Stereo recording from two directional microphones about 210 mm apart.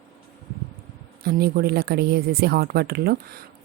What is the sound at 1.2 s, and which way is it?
Speech, 45° right (ahead or behind).